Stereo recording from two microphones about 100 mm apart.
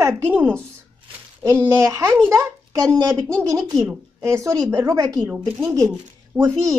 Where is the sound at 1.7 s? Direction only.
30° right (ahead or behind).